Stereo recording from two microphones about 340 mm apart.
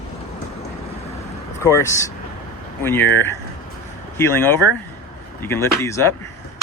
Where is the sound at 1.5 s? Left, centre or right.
Centre.